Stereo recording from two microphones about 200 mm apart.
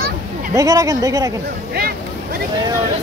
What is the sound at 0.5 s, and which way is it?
Speech, 15° right (ahead or behind).